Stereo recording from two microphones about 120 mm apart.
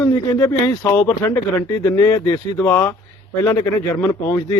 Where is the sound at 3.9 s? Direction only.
25° left (ahead or behind).